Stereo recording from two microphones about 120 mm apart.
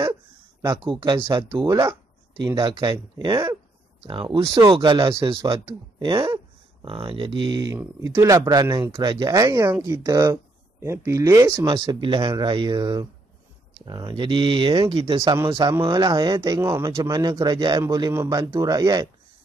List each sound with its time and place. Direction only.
0.6 s speech: 30° right (ahead or behind)
1.2 s speech: 25° right (ahead or behind)
2.6 s speech: 40° right (ahead or behind); by 11.6 s 20° right (ahead or behind)
11.6 s speech: 35° right (ahead or behind)
15.9 s speech: 35° right (ahead or behind)
17.8 s speech: 25° right (ahead or behind)